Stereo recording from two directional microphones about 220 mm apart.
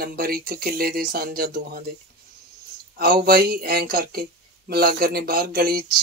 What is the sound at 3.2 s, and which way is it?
Speech, 40° right (ahead or behind).